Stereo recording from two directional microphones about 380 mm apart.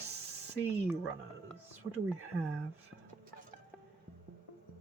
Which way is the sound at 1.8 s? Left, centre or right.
Centre.